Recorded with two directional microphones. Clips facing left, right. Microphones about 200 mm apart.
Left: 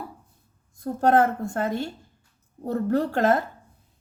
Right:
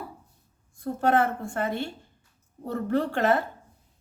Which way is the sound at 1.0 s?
40° left (ahead or behind).